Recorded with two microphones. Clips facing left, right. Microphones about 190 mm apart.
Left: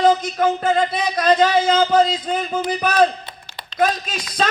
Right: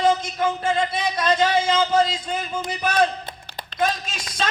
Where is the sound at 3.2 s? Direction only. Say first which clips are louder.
Right 2 dB; 50° right (ahead or behind).